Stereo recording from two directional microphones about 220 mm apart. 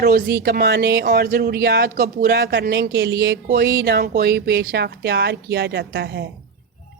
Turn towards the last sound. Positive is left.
turn(degrees=-50)  # may be behind; listen again after turning